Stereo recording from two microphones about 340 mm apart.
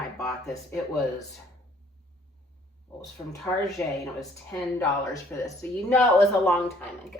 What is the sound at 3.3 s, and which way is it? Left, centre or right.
A woman's voice, centre.